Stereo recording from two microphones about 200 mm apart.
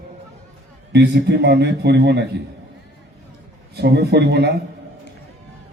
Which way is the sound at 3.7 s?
55° right (ahead or behind).